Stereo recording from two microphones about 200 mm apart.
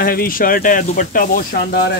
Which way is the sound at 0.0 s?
45° left (ahead or behind).